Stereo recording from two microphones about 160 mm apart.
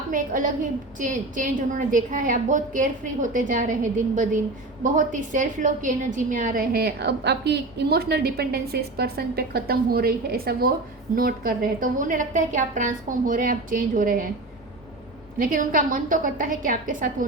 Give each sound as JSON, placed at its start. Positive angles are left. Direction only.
{"t": 0.1, "sound": "a woman's voice", "side_deg": -55}
{"t": 15.4, "sound": "a woman's voice", "side_deg": -55}